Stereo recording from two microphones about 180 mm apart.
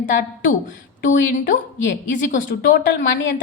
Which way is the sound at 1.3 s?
45° left (ahead or behind).